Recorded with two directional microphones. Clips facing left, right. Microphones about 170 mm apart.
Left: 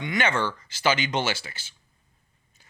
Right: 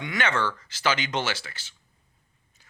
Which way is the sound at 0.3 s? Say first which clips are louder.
Right 2 dB; 25° left (ahead or behind).